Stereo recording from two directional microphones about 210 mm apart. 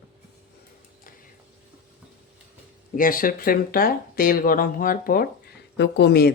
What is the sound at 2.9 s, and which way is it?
Speech, 40° left (ahead or behind).